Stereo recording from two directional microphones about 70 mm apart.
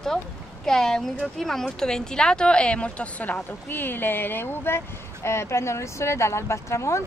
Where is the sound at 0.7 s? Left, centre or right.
Centre.